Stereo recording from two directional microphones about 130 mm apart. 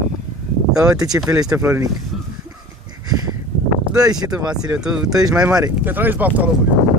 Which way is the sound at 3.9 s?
30° right (ahead or behind).